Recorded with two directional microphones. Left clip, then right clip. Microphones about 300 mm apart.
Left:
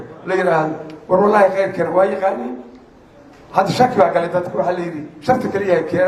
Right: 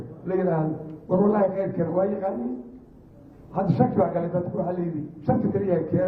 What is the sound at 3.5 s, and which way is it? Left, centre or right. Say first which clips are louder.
A man's voice: left 10 dB; centre.